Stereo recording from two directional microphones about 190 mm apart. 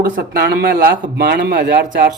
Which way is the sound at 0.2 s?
55° right (ahead or behind).